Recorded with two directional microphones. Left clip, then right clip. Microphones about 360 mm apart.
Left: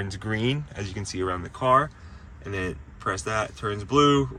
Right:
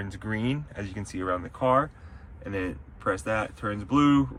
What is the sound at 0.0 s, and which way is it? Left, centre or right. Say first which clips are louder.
Speech: left 4 dB; centre.